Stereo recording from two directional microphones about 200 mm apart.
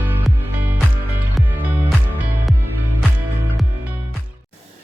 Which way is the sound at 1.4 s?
10° right (ahead or behind).